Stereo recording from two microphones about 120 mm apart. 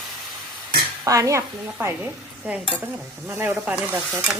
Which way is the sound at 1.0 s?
25° right (ahead or behind).